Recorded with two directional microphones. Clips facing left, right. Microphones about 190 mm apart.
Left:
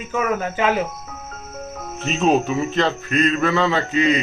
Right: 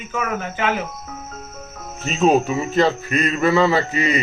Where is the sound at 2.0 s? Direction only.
5° right (ahead or behind).